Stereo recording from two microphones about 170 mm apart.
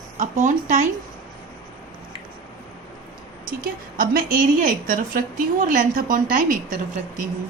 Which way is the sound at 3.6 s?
60° right (ahead or behind).